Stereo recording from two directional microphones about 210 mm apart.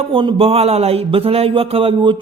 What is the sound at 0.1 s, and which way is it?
A man's voice, 25° right (ahead or behind).